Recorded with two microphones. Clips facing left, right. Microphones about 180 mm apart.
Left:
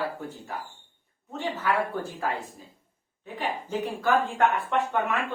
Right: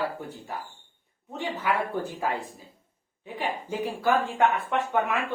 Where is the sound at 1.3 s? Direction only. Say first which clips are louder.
Left 1 dB; 10° right (ahead or behind).